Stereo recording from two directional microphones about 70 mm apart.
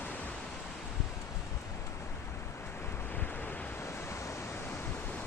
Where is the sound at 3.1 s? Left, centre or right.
Left.